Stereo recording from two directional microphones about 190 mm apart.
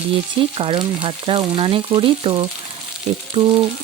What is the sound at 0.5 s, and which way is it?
Speech, 30° right (ahead or behind).